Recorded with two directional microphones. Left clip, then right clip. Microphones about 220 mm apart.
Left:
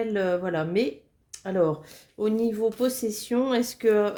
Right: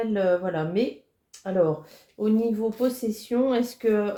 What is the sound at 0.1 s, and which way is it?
Speech, 40° left (ahead or behind).